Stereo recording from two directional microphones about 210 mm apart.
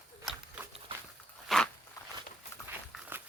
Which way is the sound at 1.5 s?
Centre (ahead or behind).